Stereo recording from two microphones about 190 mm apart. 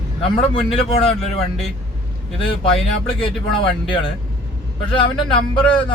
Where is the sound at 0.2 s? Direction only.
30° left (ahead or behind).